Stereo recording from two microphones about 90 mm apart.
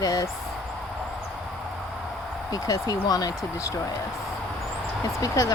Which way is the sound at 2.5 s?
45° left (ahead or behind).